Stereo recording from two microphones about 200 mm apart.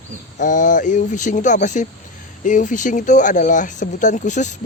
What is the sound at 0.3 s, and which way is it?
Speech, 40° left (ahead or behind).